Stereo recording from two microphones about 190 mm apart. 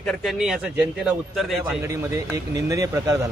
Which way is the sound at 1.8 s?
15° right (ahead or behind).